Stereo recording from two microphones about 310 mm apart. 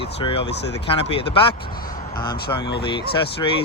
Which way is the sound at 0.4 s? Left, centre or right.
Left.